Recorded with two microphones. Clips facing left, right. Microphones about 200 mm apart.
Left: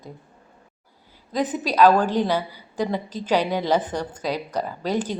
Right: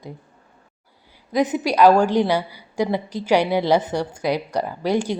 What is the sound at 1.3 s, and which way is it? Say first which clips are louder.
A woman's voice: right 4 dB; 10° right (ahead or behind).